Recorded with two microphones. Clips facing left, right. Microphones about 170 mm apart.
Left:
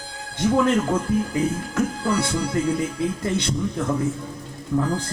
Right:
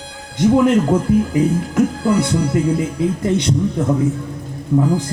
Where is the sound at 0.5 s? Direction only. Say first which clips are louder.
Right 5 dB; 15° right (ahead or behind).